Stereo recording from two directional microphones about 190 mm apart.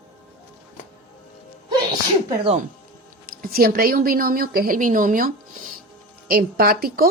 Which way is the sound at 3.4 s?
50° right (ahead or behind).